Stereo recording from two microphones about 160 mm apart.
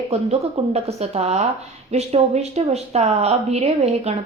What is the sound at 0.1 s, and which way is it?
A woman's voice, 40° right (ahead or behind).